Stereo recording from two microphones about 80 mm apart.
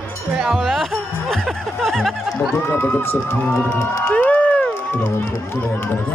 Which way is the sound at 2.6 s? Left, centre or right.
Left.